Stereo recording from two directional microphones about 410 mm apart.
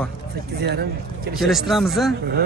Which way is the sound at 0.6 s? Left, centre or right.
Right.